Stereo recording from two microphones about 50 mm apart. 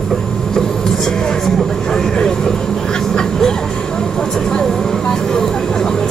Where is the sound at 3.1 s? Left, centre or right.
Centre.